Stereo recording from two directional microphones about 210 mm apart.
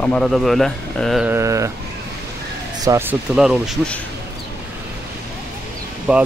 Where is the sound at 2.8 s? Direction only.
15° right (ahead or behind).